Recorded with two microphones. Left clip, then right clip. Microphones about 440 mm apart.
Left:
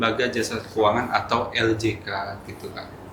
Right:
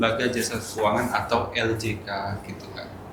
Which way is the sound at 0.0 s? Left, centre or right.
Left.